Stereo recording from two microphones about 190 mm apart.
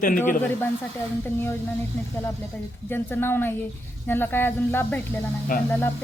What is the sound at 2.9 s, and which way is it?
Speech, 10° left (ahead or behind).